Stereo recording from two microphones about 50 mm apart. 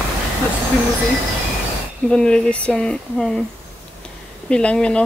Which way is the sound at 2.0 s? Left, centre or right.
Centre.